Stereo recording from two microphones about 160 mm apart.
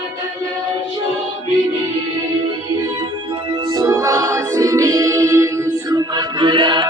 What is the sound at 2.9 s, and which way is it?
Music, 25° right (ahead or behind).